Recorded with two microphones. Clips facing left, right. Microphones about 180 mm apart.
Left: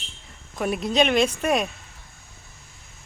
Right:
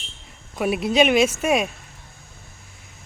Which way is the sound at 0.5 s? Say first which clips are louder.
Right 3 dB; 10° right (ahead or behind).